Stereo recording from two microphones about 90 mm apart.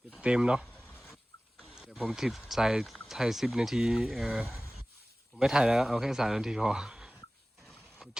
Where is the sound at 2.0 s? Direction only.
5° right (ahead or behind).